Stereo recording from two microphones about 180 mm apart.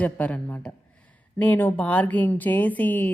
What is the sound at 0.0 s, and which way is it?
A woman's voice, 5° left (ahead or behind).